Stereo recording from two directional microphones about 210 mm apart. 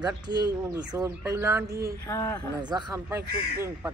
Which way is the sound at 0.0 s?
20° right (ahead or behind).